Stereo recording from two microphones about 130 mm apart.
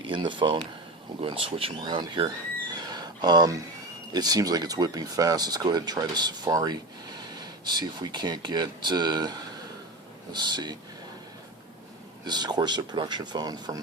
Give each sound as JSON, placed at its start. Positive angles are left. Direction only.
{"t": 0.1, "sound": "speech", "side_deg": -40}
{"t": 12.2, "sound": "speech", "side_deg": -35}